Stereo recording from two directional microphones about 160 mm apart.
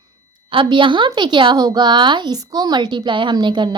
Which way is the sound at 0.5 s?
30° right (ahead or behind).